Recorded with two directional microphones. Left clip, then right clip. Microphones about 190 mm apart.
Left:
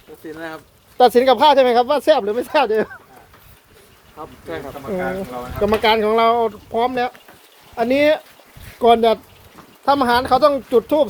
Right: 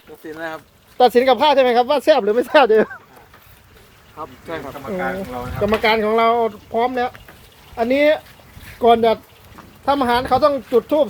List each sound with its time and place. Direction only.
0.3 s speech: 15° left (ahead or behind)
2.1 s speech: 15° right (ahead or behind)
4.2 s speech: 55° right (ahead or behind)
5.6 s speech: 10° left (ahead or behind)